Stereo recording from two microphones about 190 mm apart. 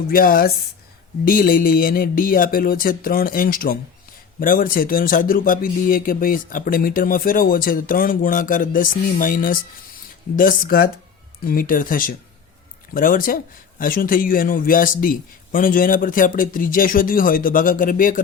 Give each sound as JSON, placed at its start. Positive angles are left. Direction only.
{"t": 0.1, "sound": "speech", "side_deg": 50}